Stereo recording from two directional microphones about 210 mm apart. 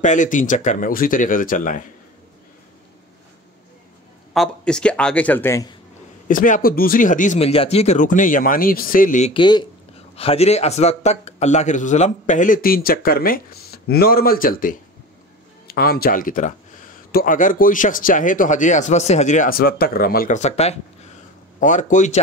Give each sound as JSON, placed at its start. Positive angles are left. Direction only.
{"t": 0.0, "sound": "speech", "side_deg": 35}
{"t": 4.3, "sound": "speech", "side_deg": 5}
{"t": 6.2, "sound": "speech", "side_deg": 40}
{"t": 9.3, "sound": "speech", "side_deg": 20}